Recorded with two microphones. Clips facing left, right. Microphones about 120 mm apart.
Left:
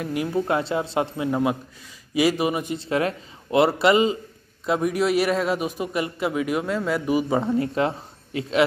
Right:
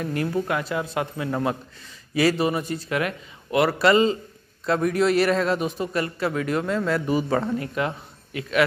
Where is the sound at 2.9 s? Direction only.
30° left (ahead or behind).